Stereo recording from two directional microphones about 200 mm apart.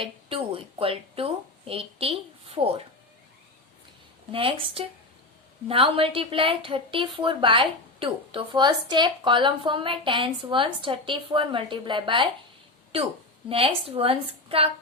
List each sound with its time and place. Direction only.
0.0 s a woman's voice: 25° right (ahead or behind)
4.3 s a woman's voice: 25° right (ahead or behind)
13.5 s a woman's voice: 30° right (ahead or behind)